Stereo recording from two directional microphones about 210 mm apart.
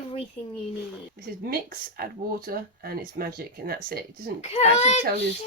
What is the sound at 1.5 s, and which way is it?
Speech, 45° right (ahead or behind).